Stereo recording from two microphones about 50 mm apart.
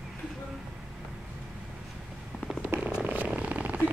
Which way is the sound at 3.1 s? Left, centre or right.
Right.